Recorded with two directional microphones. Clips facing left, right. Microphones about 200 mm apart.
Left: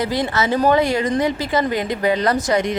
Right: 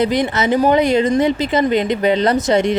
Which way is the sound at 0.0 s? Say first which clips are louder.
Right 4 dB; 20° right (ahead or behind).